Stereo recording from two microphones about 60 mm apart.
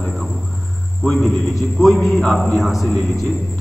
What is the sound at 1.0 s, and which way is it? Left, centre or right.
A man's voice, centre.